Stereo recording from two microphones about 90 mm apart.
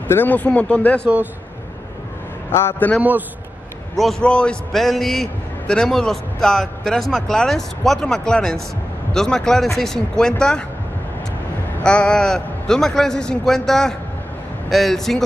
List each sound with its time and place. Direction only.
0.1 s a man's voice: 20° left (ahead or behind)
1.0 s speech: 20° right (ahead or behind)
2.5 s a man's voice: 25° left (ahead or behind)
3.0 s speech: 20° right (ahead or behind)
4.2 s a man's voice: 10° left (ahead or behind)
11.8 s a man's voice: 10° left (ahead or behind)